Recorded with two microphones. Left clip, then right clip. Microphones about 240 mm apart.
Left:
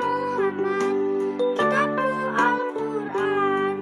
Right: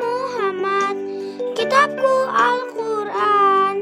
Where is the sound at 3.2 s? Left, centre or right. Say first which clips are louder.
Right 8 dB; right.